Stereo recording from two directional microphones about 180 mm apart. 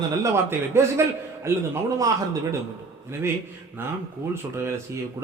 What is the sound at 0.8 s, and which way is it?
A man's voice, 15° right (ahead or behind).